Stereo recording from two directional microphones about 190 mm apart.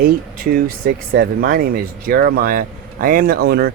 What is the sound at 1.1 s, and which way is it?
Speech, 55° right (ahead or behind).